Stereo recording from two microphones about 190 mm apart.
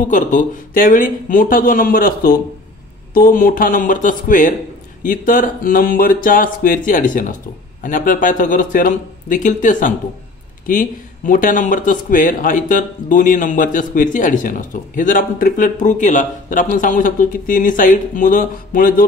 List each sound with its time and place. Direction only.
0.1 s speech: 40° left (ahead or behind)